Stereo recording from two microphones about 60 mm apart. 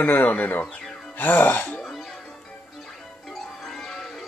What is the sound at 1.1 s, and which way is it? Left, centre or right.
Speech, left.